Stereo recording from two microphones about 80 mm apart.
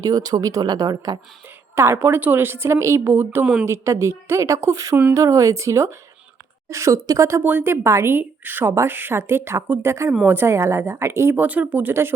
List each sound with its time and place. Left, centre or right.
0.0 s speech: right
1.7 s speech: right
3.4 s a woman's voice: centre
3.7 s speech: right
7.4 s a woman's voice: right